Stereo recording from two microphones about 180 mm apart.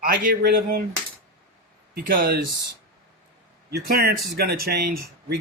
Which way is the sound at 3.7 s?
60° right (ahead or behind).